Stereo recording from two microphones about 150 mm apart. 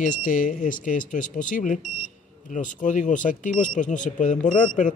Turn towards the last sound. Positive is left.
turn(degrees=60)  # may be behind; listen again after turning